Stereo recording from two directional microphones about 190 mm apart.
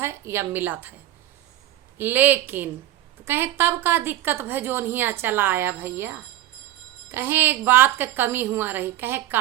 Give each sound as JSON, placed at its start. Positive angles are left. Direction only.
{"t": 0.0, "sound": "a woman's voice", "side_deg": -15}
{"t": 2.0, "sound": "a woman's voice", "side_deg": -10}